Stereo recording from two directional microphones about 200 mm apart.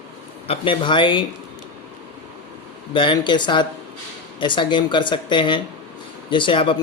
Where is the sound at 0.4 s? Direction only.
25° left (ahead or behind).